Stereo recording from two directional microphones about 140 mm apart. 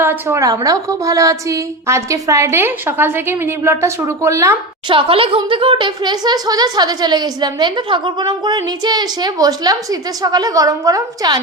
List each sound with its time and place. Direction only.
0.0 s a woman's voice: 15° right (ahead or behind)
4.9 s speech: 40° right (ahead or behind)